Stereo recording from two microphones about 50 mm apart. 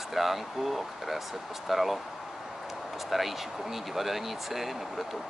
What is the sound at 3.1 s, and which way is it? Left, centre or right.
Speech, centre.